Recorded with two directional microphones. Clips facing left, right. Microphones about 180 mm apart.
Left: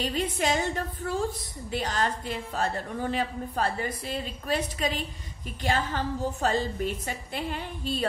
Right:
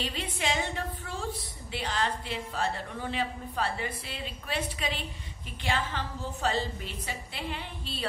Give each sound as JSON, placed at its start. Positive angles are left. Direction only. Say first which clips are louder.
{"t": 0.0, "sound": "a woman's voice", "louder": "left 6 dB", "side_deg": 45}